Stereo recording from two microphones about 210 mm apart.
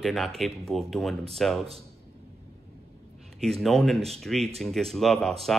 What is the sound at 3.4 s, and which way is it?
Speech, centre (ahead or behind).